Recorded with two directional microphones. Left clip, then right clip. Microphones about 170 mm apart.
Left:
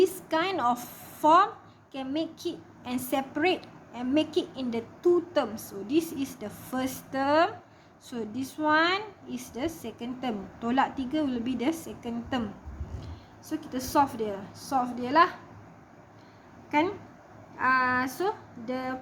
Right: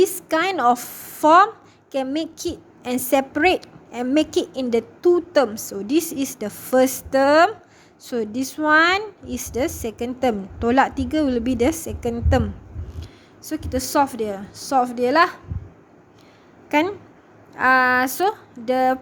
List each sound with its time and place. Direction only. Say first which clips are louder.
0.0 s a woman's voice: right 7 dB; 45° right (ahead or behind)
16.7 s speech: right 6 dB; 55° right (ahead or behind)